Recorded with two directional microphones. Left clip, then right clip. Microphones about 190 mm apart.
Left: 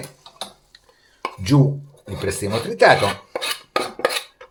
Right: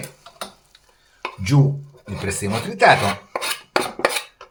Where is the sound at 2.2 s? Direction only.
15° left (ahead or behind).